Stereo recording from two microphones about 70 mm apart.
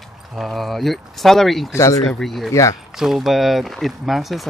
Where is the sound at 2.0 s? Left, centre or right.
Centre.